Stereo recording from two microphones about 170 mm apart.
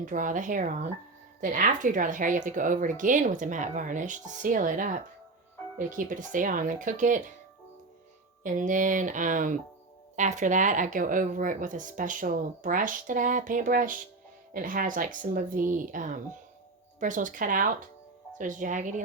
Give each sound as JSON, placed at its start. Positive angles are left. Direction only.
{"t": 0.0, "sound": "speech", "side_deg": -50}
{"t": 8.4, "sound": "speech", "side_deg": -50}